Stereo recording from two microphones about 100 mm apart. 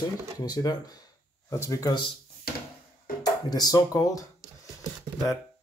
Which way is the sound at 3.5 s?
40° left (ahead or behind).